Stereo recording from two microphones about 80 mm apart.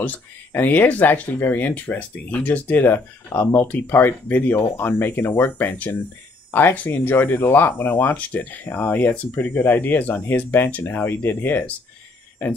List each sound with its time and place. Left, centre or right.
0.0 s speech: left